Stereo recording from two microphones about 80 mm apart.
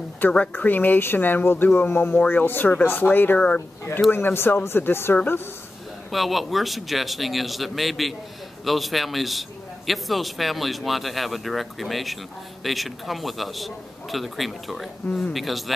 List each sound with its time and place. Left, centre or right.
0.5 s speech: left
6.1 s a man's voice: centre
15.0 s a man's voice: centre
15.3 s a man's voice: centre